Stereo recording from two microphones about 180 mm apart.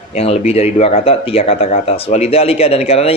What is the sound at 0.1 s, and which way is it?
Speech, 35° left (ahead or behind).